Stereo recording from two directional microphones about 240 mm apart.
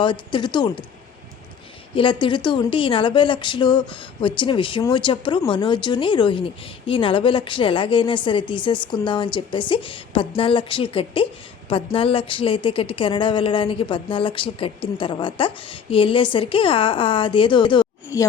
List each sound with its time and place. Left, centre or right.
0.0 s speech: centre
2.0 s speech: left